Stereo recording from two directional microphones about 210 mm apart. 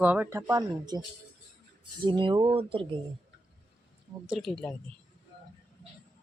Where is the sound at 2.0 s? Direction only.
25° right (ahead or behind).